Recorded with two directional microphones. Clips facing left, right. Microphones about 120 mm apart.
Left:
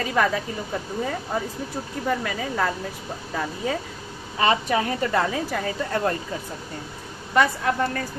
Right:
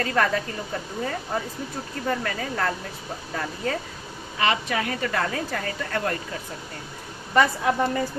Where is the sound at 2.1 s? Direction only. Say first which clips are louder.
Left 1 dB; 5° left (ahead or behind).